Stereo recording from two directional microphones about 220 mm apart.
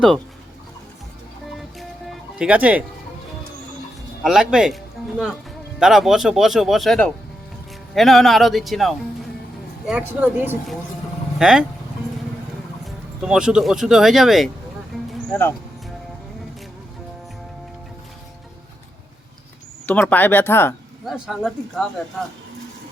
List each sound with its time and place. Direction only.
1.5 s music: centre (ahead or behind)
4.2 s speech: centre (ahead or behind)
12.8 s speech: 5° right (ahead or behind)
19.9 s speech: 5° left (ahead or behind)